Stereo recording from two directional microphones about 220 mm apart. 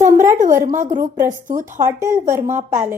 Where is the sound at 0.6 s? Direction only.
35° right (ahead or behind).